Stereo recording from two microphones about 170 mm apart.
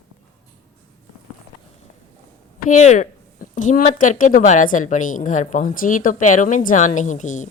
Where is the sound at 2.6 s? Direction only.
45° left (ahead or behind).